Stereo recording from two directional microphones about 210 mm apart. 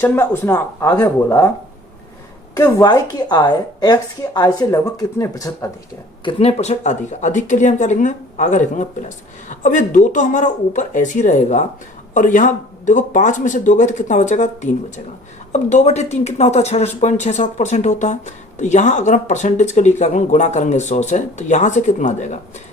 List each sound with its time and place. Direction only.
0.0 s a woman's voice: 10° left (ahead or behind)
2.6 s a woman's voice: 15° left (ahead or behind)
6.2 s speech: 30° left (ahead or behind)